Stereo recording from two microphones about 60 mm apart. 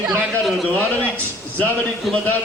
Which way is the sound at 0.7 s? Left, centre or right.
Left.